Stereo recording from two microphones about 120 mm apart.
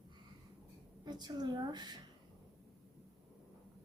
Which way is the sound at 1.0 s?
35° right (ahead or behind).